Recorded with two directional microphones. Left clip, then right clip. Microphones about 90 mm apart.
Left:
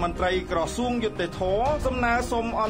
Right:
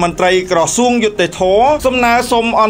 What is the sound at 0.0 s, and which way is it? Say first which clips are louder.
A man's voice: right 13 dB; 30° right (ahead or behind).